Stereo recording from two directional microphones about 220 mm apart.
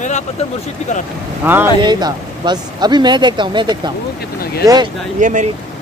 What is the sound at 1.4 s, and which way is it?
Speech, 10° right (ahead or behind).